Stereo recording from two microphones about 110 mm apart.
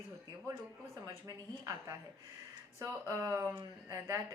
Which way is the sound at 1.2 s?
35° right (ahead or behind).